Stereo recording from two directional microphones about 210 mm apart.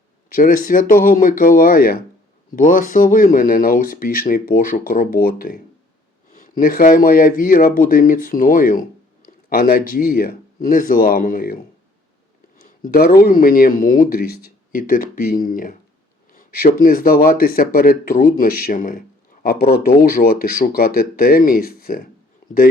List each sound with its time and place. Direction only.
0.3 s speech: 40° left (ahead or behind)
12.5 s a sound: 40° left (ahead or behind)
13.2 s speech: 40° left (ahead or behind)